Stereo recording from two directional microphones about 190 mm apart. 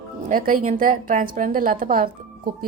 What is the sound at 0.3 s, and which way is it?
A woman's voice, 45° right (ahead or behind).